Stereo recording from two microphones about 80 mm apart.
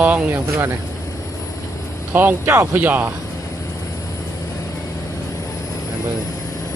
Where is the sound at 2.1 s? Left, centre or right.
Right.